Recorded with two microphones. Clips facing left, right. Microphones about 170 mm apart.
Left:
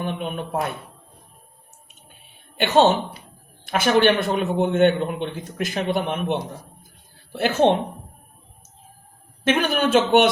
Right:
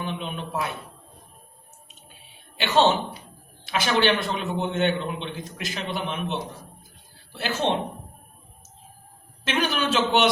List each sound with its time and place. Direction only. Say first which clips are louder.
0.0 s a man's voice: left 4 dB; 50° left (ahead or behind)
2.6 s a man's voice: left 4 dB; 50° left (ahead or behind)
9.4 s a man's voice: left 5 dB; 55° left (ahead or behind)